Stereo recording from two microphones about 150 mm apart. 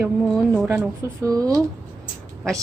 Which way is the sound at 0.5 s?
15° right (ahead or behind).